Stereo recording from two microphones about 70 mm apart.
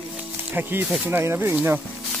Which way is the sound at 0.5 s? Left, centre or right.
Right.